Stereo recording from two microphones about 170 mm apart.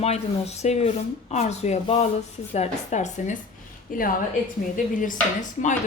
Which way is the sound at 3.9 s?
55° left (ahead or behind).